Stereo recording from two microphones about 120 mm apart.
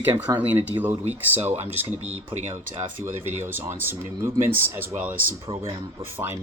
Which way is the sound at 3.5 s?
20° right (ahead or behind).